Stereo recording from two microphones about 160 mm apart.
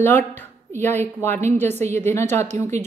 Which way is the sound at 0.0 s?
15° left (ahead or behind).